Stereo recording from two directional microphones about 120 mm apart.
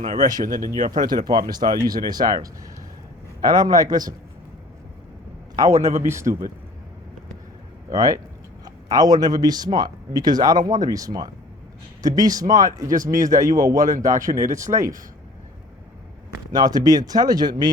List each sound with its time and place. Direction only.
0.0 s speech: 90° right
1.0 s speech: 35° right (ahead or behind)
5.7 s a man's voice: 70° right (ahead or behind)
6.0 s a man's voice: 25° right (ahead or behind)
7.9 s a man's voice: 30° right (ahead or behind)
12.9 s speech: 90° right
13.3 s a man's voice: 30° right (ahead or behind)
14.2 s speech: 90° right
14.6 s a man's voice: 25° right (ahead or behind)
16.5 s speech: 35° right (ahead or behind)